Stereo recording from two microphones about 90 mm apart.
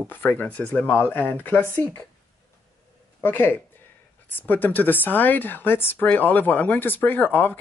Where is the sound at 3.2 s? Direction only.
25° left (ahead or behind).